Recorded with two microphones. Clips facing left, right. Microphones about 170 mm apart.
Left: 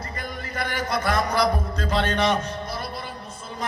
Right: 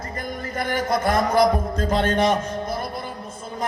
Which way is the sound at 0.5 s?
45° right (ahead or behind).